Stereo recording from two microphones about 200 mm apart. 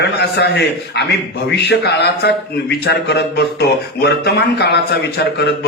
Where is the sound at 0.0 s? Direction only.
60° left (ahead or behind).